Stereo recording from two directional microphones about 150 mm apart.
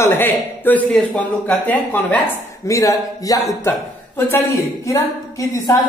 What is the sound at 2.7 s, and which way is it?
A woman's voice, 20° left (ahead or behind).